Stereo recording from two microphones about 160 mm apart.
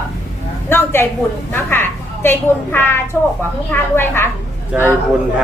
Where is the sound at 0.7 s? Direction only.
15° left (ahead or behind).